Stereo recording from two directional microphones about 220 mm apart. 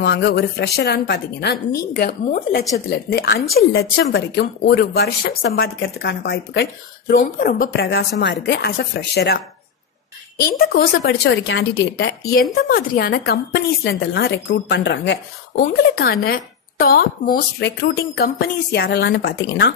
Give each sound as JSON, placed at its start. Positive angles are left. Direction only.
{"t": 0.0, "sound": "a woman's voice", "side_deg": 50}
{"t": 10.6, "sound": "a woman's voice", "side_deg": 45}